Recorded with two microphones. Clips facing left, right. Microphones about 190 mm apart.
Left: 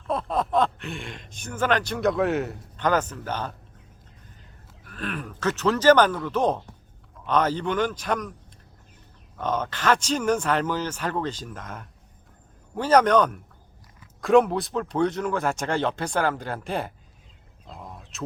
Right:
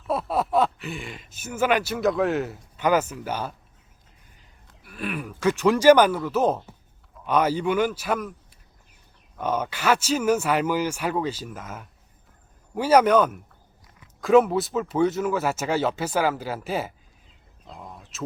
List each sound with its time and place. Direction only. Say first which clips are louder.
0.1 s speech: right 1 dB; 5° right (ahead or behind)
4.8 s speech: right 2 dB; 10° right (ahead or behind)
9.4 s speech: right 1 dB; 10° right (ahead or behind)
17.7 s a sound: even; centre (ahead or behind)